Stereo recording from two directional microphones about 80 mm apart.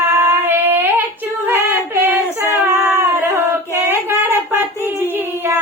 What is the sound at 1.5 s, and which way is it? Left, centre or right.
Female singing, right.